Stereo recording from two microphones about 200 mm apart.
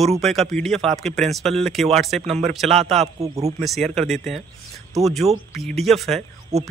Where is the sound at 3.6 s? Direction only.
Centre (ahead or behind).